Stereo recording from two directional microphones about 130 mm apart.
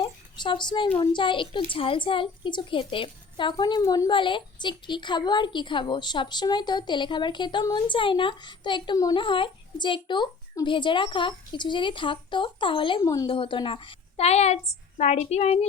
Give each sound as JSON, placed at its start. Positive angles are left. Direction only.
{"t": 0.0, "sound": "a child's voice", "side_deg": 40}
{"t": 3.8, "sound": "speech", "side_deg": 25}
{"t": 4.1, "sound": "a woman's voice", "side_deg": 40}
{"t": 13.0, "sound": "speech", "side_deg": 25}
{"t": 13.3, "sound": "a woman's voice", "side_deg": 40}